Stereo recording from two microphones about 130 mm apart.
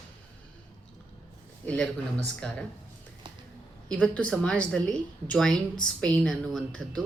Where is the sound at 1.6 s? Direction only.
10° left (ahead or behind).